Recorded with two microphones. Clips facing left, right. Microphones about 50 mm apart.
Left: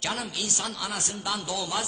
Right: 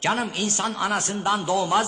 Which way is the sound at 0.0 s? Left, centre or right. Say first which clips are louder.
Right 7 dB; right.